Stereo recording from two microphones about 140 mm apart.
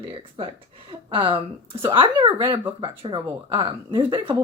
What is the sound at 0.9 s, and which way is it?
Speech, 35° right (ahead or behind).